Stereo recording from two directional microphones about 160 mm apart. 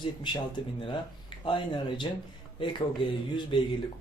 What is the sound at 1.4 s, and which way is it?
Speech, 30° left (ahead or behind).